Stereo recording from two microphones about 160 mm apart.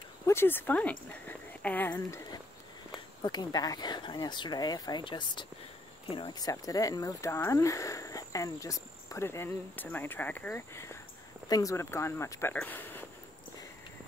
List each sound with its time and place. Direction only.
0.3 s speech: 15° left (ahead or behind)